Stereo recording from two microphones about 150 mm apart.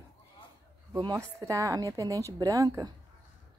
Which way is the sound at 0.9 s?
20° right (ahead or behind).